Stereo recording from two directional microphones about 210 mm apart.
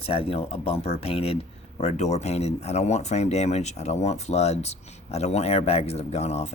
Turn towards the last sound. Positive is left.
turn(degrees=30)  # may be behind; listen again after turning